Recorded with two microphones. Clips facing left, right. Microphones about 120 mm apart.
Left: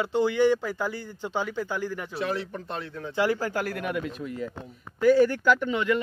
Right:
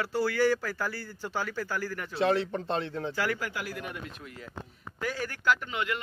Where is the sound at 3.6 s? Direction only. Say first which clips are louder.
Left 8 dB; 65° left (ahead or behind).